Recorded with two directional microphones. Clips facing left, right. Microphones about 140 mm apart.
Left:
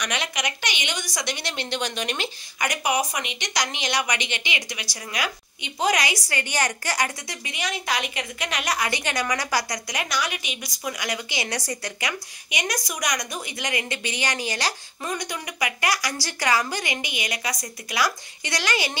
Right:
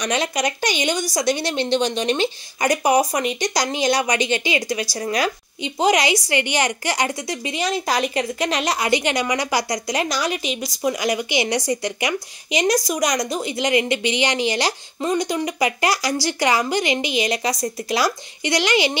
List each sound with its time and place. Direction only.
0.0 s a woman's voice: 35° right (ahead or behind)